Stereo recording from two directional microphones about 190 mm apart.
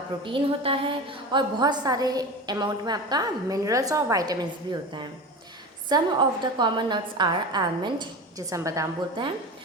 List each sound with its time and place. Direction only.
0.3 s a woman's voice: 25° right (ahead or behind)